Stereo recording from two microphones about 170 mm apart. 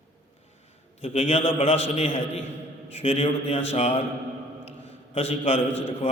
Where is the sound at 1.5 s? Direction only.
35° left (ahead or behind).